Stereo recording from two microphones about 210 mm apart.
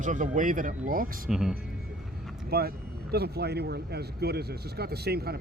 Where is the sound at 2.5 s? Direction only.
50° right (ahead or behind).